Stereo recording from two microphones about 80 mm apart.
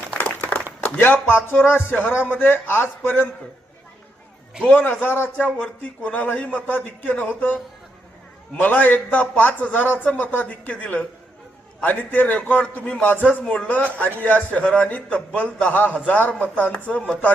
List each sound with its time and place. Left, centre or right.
0.2 s a sound: left
0.9 s a man's voice: left
4.6 s a man's voice: left